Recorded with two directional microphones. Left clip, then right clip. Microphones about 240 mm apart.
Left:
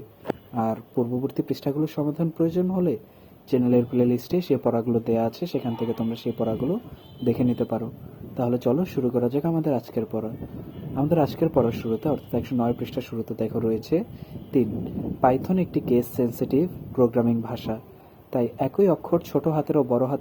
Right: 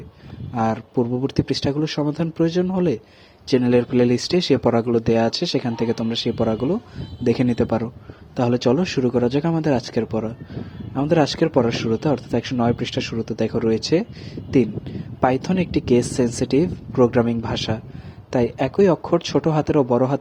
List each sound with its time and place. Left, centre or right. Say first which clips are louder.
0.5 s speech: right 6 dB; right
15.2 s speech: right 2 dB; right